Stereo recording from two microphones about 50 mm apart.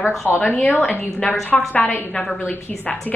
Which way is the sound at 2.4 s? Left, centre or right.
Left.